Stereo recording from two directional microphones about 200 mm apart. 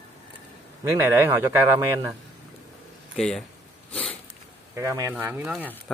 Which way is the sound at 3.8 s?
5° left (ahead or behind).